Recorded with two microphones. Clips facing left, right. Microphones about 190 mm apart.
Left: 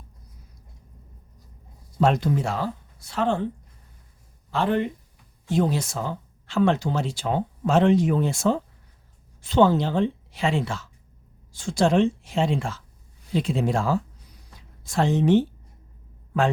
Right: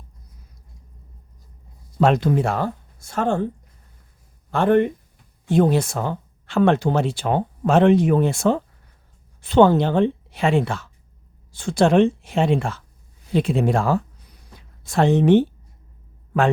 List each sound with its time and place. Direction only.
2.0 s speech: 75° right (ahead or behind); by 3.4 s 45° right (ahead or behind)
4.5 s speech: 55° right (ahead or behind)